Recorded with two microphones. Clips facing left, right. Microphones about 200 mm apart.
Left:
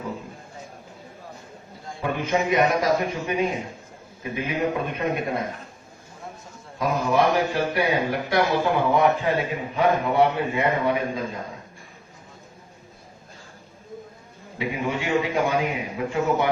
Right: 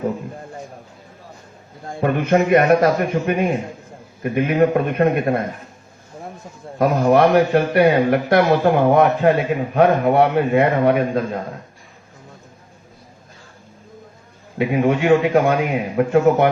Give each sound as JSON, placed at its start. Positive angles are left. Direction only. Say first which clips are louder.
{"t": 1.8, "sound": "a man's voice", "louder": "right 7 dB", "side_deg": -55}
{"t": 6.7, "sound": "a man's voice", "louder": "right 7 dB", "side_deg": -60}
{"t": 14.6, "sound": "a man's voice", "louder": "right 10 dB", "side_deg": -55}